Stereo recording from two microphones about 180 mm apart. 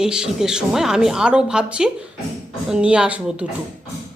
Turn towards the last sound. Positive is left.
turn(degrees=-5)  # may be behind; listen again after turning